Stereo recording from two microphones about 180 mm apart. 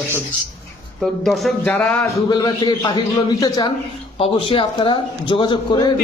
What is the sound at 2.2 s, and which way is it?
A man's voice, 25° left (ahead or behind).